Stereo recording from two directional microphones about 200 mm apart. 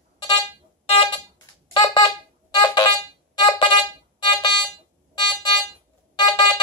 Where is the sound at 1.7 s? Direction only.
20° left (ahead or behind).